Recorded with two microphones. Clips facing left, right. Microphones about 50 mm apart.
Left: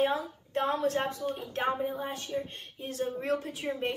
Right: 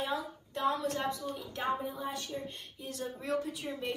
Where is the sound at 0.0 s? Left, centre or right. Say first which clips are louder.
Left 7 dB; left.